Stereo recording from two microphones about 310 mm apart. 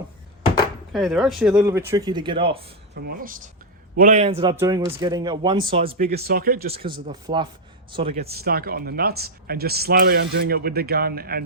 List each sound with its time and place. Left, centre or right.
0.9 s a man's voice: centre
2.9 s a man's voice: right
6.0 s speech: right
6.7 s a man's voice: centre
8.2 s speech: right